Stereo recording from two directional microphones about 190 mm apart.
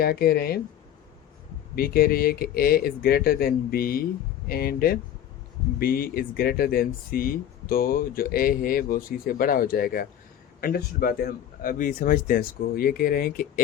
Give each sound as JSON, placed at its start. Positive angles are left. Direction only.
{"t": 0.0, "sound": "speech", "side_deg": 55}
{"t": 1.7, "sound": "speech", "side_deg": 50}